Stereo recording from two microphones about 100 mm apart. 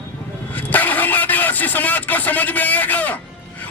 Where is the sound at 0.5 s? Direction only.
15° left (ahead or behind).